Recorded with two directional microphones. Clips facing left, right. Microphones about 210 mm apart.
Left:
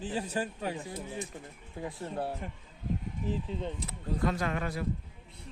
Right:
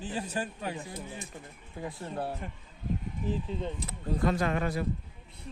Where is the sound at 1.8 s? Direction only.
15° left (ahead or behind).